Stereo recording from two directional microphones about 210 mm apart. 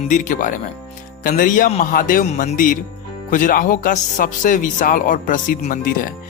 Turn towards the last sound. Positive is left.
turn(degrees=40)  # may be behind; listen again after turning